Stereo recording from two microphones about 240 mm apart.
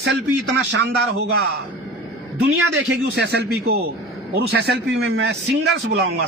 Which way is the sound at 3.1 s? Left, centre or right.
Right.